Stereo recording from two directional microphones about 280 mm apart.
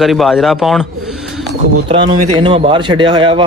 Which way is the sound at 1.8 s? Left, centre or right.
Centre.